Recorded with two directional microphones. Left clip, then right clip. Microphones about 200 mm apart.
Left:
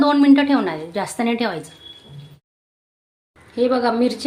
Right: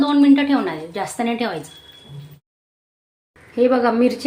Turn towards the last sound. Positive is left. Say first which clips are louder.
# right 2 dB
turn(degrees=-5)  # may be behind; listen again after turning